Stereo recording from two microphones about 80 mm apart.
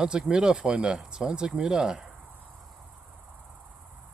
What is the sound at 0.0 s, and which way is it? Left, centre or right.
Speech, centre.